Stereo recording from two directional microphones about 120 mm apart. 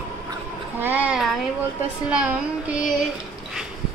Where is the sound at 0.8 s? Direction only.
15° right (ahead or behind).